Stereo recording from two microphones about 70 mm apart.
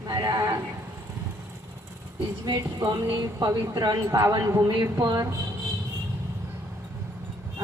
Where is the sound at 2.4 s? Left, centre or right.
Right.